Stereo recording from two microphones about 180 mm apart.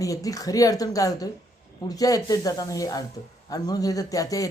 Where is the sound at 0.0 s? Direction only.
20° left (ahead or behind).